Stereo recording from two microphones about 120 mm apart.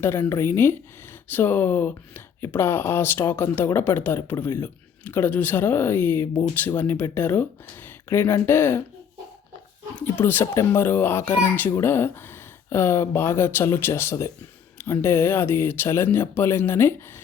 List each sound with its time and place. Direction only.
0.0 s a child's voice: 20° left (ahead or behind)
9.9 s a child's voice: 15° left (ahead or behind)